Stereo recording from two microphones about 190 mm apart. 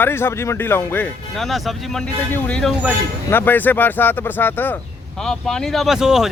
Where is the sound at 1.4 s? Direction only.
Centre (ahead or behind).